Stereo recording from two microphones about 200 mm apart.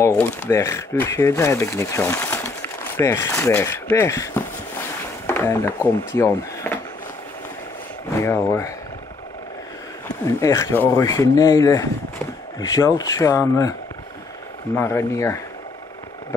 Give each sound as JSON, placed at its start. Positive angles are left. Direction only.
{"t": 0.0, "sound": "speech", "side_deg": 10}
{"t": 8.2, "sound": "speech", "side_deg": 15}
{"t": 10.2, "sound": "speech", "side_deg": 15}
{"t": 14.8, "sound": "speech", "side_deg": 10}